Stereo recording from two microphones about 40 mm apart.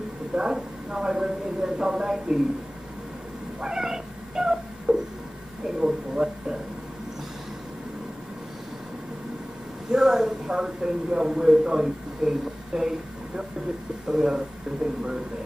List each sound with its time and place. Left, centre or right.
0.3 s speech: centre
3.6 s cat: centre
5.8 s a sound: centre
9.8 s speech: centre
14.0 s speech: centre